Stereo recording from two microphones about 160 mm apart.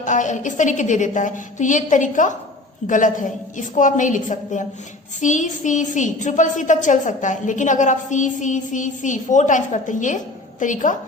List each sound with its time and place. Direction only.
0.0 s a woman's voice: 50° left (ahead or behind)